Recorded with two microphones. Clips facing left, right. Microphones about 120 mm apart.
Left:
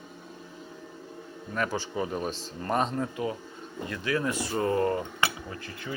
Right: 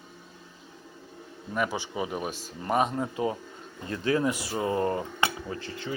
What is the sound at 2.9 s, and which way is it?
Speech, 25° right (ahead or behind).